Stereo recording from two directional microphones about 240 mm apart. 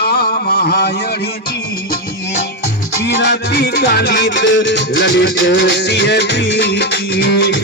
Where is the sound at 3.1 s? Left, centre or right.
Left.